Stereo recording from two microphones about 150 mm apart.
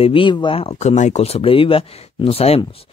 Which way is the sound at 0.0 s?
35° left (ahead or behind).